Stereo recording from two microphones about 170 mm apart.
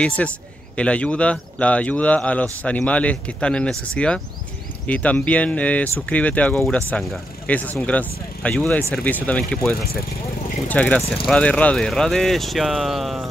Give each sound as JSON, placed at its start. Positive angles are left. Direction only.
{"t": 0.2, "sound": "speech", "side_deg": 5}